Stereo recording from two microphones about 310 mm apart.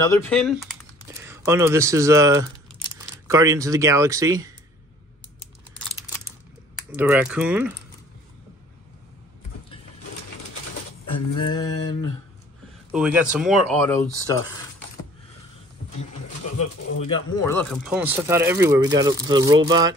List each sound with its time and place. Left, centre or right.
0.0 s speech: centre
1.0 s speech: centre
6.9 s speech: centre
11.1 s a sound: centre
12.9 s speech: centre
16.0 s speech: left
17.5 s speech: centre